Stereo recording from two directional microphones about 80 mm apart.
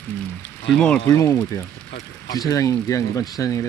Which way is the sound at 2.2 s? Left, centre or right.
Left.